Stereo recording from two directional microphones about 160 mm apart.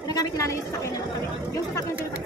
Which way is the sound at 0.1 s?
20° left (ahead or behind).